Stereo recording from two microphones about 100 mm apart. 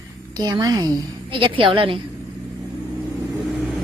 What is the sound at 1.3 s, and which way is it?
Speech, 60° right (ahead or behind).